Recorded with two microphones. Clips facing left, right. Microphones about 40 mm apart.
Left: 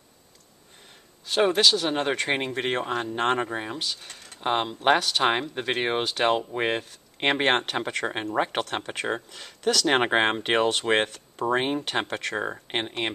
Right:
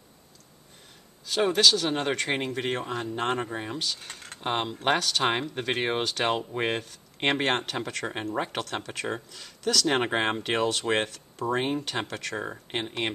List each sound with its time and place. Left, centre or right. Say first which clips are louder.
1.2 s a sound: left 3 dB; left
1.5 s speech: left 1 dB; centre; by 3.3 s left
3.3 s speech: left 3 dB; left
3.6 s speech: even; centre
7.3 s speech: left 3 dB; left
9.3 s speech: left 3 dB; left